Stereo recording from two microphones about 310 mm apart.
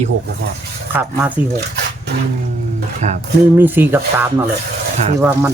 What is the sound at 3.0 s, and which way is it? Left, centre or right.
Speech, right.